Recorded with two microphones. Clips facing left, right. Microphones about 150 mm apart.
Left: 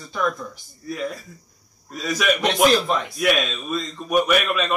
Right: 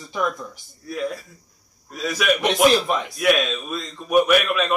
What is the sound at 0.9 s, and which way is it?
A man's voice, centre (ahead or behind).